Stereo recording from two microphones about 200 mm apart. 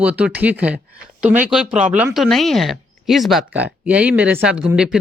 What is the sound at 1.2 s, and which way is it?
Speech, 35° right (ahead or behind).